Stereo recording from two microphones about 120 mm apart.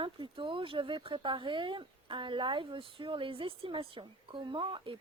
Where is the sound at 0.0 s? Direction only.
45° right (ahead or behind).